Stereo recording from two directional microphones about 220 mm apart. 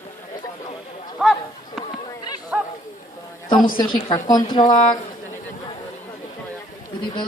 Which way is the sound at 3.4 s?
20° left (ahead or behind).